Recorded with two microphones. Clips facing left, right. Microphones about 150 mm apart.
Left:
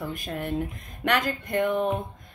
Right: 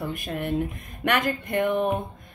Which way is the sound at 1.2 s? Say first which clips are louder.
Right 1 dB; 20° right (ahead or behind).